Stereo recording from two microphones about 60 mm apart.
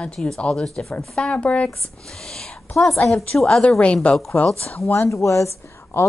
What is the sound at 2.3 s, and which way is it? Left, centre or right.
A woman's voice, centre.